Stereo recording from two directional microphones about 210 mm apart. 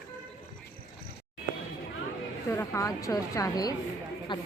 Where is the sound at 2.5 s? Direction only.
15° left (ahead or behind).